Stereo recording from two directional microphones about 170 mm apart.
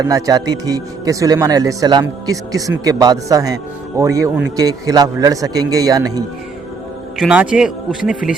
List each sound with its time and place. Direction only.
0.0 s speech: 20° right (ahead or behind)
7.2 s speech: 5° right (ahead or behind)